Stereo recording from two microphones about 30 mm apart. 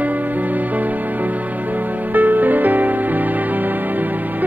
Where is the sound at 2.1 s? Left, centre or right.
Right.